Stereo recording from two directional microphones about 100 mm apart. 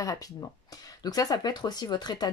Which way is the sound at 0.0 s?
35° left (ahead or behind).